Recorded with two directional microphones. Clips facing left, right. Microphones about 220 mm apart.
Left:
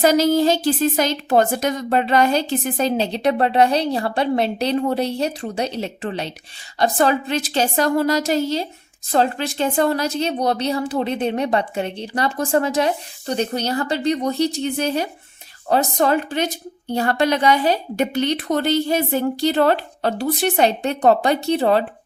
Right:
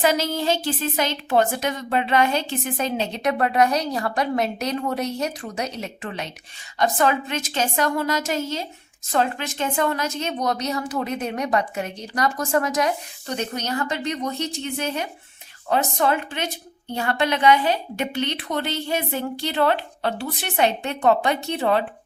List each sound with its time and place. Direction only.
0.0 s a woman's voice: 40° left (ahead or behind)